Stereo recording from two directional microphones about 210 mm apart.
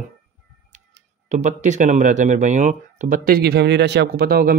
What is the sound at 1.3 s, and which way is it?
Speech, 35° right (ahead or behind).